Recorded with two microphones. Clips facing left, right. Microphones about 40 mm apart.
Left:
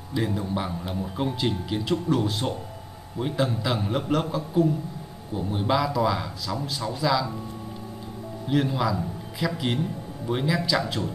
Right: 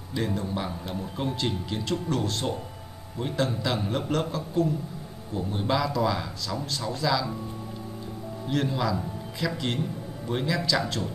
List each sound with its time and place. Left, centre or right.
0.1 s speech: centre
8.5 s a man's voice: centre